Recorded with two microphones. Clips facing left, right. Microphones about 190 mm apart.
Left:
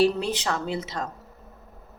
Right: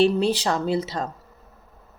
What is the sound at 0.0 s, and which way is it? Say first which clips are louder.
Speech: right 3 dB; 30° right (ahead or behind).